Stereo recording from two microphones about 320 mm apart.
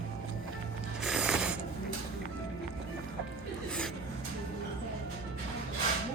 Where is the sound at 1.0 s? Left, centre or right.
Centre.